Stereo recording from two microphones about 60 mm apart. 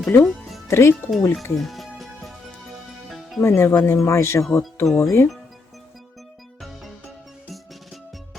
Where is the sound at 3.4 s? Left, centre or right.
Left.